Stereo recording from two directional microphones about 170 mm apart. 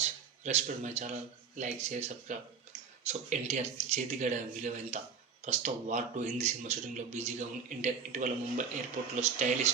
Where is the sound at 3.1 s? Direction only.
45° right (ahead or behind).